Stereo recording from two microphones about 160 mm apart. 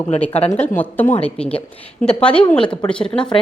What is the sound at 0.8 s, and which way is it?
Speech, 10° left (ahead or behind).